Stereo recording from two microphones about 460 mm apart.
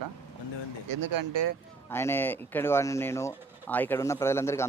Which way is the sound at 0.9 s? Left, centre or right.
Right.